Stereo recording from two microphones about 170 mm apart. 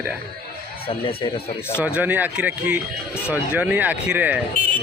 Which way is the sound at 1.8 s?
10° right (ahead or behind).